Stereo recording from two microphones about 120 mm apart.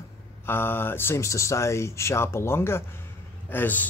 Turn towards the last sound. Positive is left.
turn(degrees=15)  # may be behind; listen again after turning